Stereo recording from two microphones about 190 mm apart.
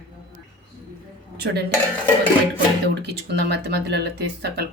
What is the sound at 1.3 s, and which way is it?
Dishes, 55° right (ahead or behind).